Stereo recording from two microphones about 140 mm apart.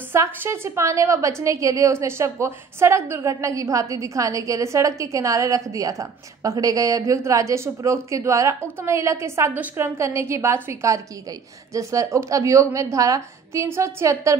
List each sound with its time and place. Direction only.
0.1 s a woman's voice: 20° right (ahead or behind)